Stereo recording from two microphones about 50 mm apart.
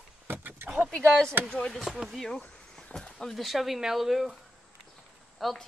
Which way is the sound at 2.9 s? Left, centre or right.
Centre.